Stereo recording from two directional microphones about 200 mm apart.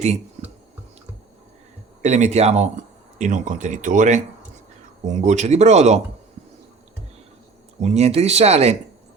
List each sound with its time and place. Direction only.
2.0 s speech: 35° right (ahead or behind)
7.8 s speech: 35° right (ahead or behind)